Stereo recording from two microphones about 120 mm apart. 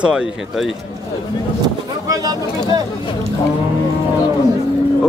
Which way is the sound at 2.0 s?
30° right (ahead or behind).